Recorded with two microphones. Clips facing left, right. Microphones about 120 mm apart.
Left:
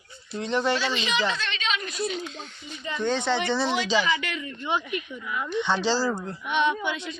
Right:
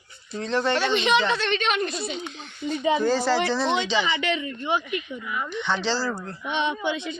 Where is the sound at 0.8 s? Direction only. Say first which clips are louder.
Right 5 dB; 55° right (ahead or behind).